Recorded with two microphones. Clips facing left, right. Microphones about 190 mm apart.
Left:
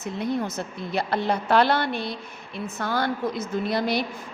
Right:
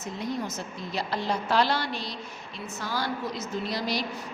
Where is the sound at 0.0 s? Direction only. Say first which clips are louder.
Left 5 dB; 60° left (ahead or behind).